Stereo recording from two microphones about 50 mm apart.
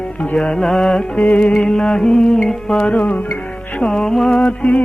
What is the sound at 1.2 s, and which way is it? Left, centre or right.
Music, left.